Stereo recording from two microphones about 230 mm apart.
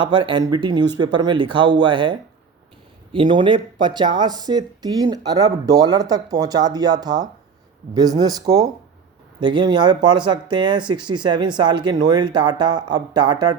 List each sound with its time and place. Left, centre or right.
0.0 s speech: right